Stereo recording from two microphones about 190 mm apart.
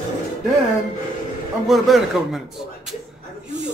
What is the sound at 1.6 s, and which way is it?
Speech, centre (ahead or behind).